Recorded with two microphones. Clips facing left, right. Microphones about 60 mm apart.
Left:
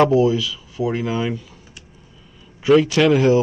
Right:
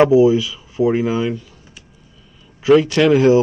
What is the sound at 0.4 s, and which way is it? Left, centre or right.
Speech, right.